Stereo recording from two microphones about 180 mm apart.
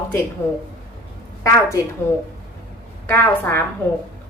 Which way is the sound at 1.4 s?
20° left (ahead or behind).